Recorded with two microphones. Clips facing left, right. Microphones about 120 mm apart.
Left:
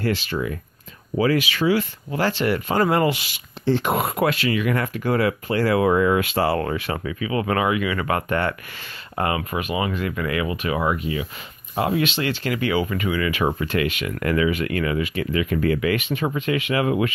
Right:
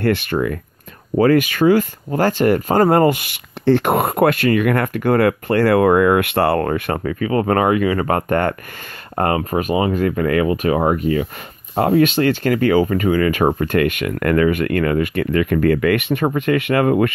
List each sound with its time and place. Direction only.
0.0 s speech: 55° right (ahead or behind)